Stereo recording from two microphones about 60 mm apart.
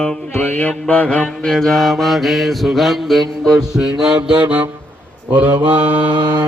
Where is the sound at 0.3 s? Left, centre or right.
Left.